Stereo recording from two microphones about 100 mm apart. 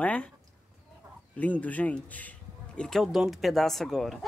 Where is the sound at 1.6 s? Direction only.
15° left (ahead or behind).